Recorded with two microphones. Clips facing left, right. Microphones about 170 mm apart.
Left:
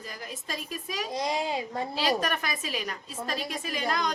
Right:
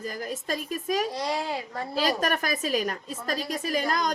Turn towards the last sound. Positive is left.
turn(degrees=-40)  # may be behind; listen again after turning